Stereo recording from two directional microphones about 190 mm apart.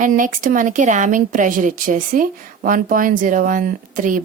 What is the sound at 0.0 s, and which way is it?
Speech, 45° right (ahead or behind).